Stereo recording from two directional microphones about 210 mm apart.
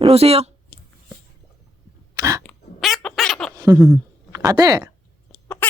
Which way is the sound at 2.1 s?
15° right (ahead or behind).